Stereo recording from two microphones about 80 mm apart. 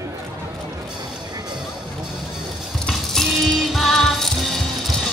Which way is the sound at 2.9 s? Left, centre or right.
Centre.